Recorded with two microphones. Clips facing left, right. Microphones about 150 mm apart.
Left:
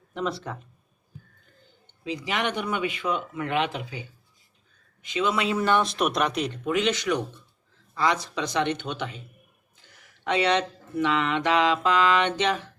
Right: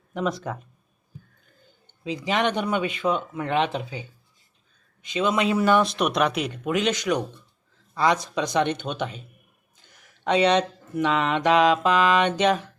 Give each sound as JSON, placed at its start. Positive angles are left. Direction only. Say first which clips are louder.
{"t": 0.1, "sound": "speech", "louder": "right 3 dB", "side_deg": -15}
{"t": 2.0, "sound": "speech", "louder": "right 4 dB", "side_deg": -20}
{"t": 5.0, "sound": "mantra", "louder": "right 3 dB", "side_deg": -20}
{"t": 6.7, "sound": "mantra", "louder": "right 1 dB", "side_deg": -15}
{"t": 8.8, "sound": "speech", "louder": "right 3 dB", "side_deg": -20}
{"t": 9.9, "sound": "mantra", "louder": "right 4 dB", "side_deg": -15}